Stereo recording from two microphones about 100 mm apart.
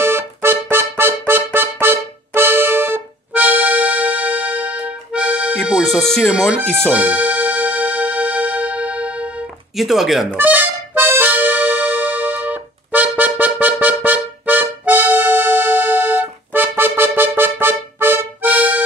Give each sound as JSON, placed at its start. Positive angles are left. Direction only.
{"t": 0.0, "sound": "music", "side_deg": -25}
{"t": 5.9, "sound": "speech", "side_deg": 5}
{"t": 6.9, "sound": "music", "side_deg": -15}
{"t": 9.8, "sound": "speech", "side_deg": 0}
{"t": 10.3, "sound": "music", "side_deg": -20}